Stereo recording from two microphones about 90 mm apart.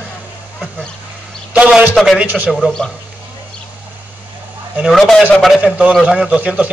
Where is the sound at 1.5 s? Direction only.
15° right (ahead or behind).